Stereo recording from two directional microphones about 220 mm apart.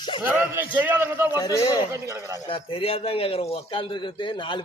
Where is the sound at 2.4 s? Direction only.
25° left (ahead or behind).